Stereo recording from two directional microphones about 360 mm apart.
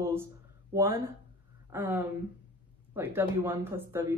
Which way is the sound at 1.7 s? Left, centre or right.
Centre.